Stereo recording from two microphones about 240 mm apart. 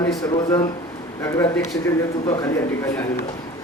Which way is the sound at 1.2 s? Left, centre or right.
Centre.